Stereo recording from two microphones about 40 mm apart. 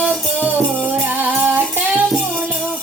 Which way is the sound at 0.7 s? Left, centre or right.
Right.